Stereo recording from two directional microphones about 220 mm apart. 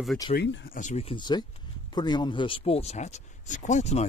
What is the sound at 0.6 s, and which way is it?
Speech, 35° left (ahead or behind).